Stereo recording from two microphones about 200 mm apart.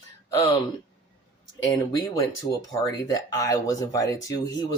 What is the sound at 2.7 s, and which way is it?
Speech, 15° left (ahead or behind).